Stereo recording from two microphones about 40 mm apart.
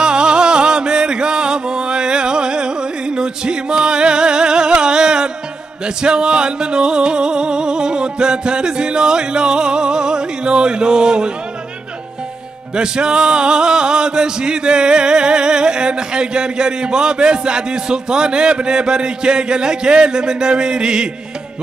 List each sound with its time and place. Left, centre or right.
0.0 s music: right
12.7 s music: right